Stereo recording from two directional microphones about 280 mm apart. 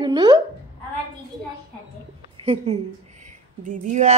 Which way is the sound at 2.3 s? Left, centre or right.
Right.